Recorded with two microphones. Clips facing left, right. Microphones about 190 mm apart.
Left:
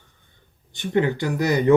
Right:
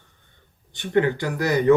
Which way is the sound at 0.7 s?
15° left (ahead or behind).